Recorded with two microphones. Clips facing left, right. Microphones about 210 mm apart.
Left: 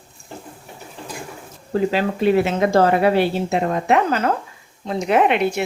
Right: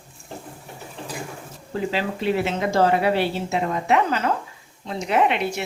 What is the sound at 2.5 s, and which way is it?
A woman's voice, 50° left (ahead or behind).